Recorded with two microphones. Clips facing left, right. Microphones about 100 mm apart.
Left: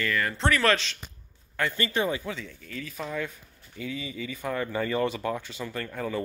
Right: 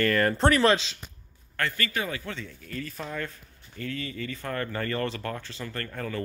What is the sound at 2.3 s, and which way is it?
Speech, centre (ahead or behind).